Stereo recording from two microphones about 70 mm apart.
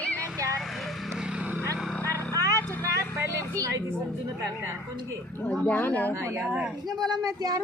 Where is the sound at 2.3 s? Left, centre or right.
Right.